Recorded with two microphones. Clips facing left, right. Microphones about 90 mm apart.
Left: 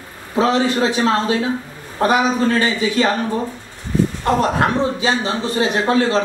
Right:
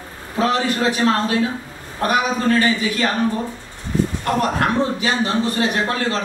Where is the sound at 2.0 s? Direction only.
20° left (ahead or behind).